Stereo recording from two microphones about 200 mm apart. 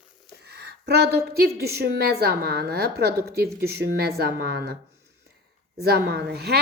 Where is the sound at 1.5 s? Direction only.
50° right (ahead or behind).